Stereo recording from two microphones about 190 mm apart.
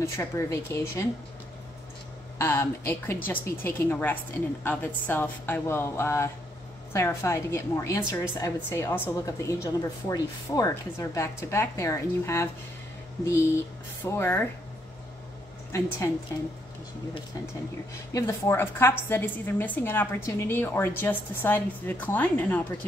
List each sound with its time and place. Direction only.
0.0 s a woman's voice: 15° left (ahead or behind)
2.3 s a woman's voice: 15° left (ahead or behind)
18.1 s a woman's voice: 15° left (ahead or behind)